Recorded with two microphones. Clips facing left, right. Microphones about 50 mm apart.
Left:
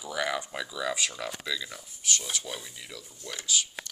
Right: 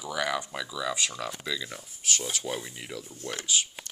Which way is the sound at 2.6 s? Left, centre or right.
Right.